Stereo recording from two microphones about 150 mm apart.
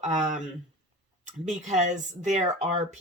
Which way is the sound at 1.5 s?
55° right (ahead or behind).